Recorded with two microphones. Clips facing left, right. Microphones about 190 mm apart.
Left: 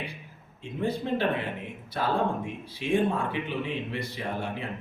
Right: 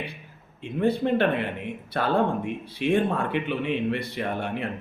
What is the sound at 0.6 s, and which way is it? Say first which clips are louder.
A man's voice: right 6 dB; 65° right (ahead or behind).